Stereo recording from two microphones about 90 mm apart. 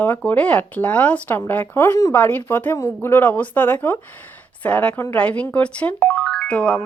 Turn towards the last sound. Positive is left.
turn(degrees=15)  # may be behind; listen again after turning